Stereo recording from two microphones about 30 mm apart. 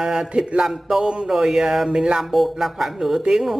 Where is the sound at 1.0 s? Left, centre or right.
Right.